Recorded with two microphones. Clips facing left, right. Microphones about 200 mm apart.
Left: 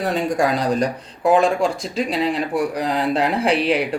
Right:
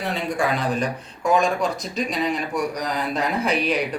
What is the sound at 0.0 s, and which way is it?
A man's voice, 45° left (ahead or behind).